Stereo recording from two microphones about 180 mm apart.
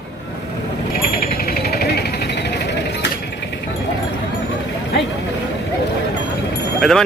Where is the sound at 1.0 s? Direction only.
55° left (ahead or behind); by 3.1 s 70° left (ahead or behind).